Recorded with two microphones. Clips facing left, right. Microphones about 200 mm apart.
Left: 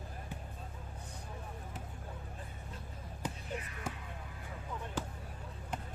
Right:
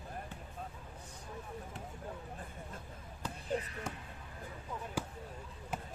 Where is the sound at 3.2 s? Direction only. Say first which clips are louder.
Left 2 dB; 15° left (ahead or behind).